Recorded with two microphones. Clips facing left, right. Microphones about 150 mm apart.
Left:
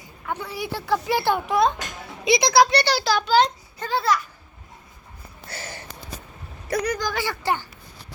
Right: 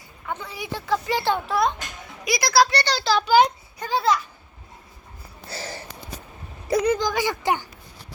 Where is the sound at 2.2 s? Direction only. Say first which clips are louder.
Left 3 dB; 25° left (ahead or behind); by 3.2 s centre (ahead or behind).